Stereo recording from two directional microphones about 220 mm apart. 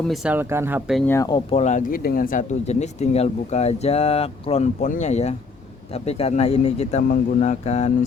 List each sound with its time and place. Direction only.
0.1 s speech: 5° right (ahead or behind)
1.0 s speech: 15° left (ahead or behind)
1.5 s speech: 30° left (ahead or behind)